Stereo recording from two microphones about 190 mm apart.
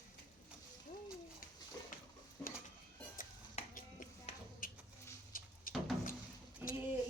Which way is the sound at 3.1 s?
45° left (ahead or behind).